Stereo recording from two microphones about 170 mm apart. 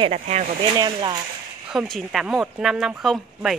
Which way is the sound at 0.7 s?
25° right (ahead or behind).